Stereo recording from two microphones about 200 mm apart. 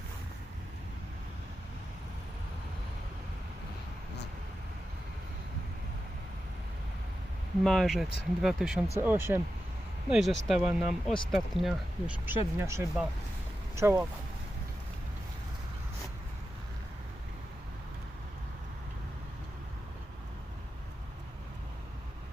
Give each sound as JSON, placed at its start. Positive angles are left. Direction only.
{"t": 7.6, "sound": "speech", "side_deg": 0}